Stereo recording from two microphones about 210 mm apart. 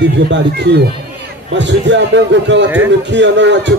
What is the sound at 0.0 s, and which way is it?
A man's voice, 55° right (ahead or behind).